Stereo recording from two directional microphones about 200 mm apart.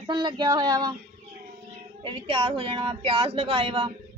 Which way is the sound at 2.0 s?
25° right (ahead or behind).